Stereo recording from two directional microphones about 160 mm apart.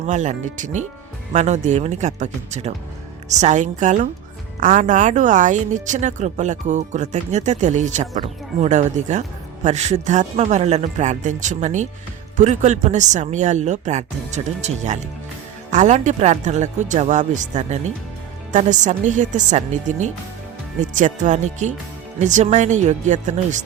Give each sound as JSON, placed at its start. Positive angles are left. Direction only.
{"t": 0.0, "sound": "speech", "side_deg": -50}